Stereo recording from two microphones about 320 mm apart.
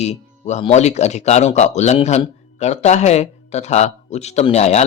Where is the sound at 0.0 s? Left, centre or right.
Left.